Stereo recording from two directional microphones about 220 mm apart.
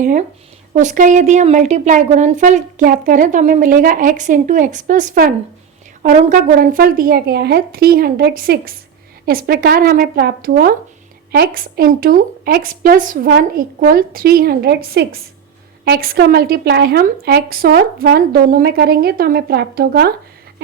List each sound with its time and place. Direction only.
0.0 s a woman's voice: 35° right (ahead or behind)